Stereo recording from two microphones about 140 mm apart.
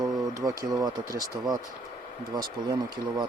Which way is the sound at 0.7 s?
25° right (ahead or behind).